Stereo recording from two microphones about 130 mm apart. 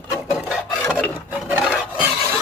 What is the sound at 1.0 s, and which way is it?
Filing, 10° right (ahead or behind).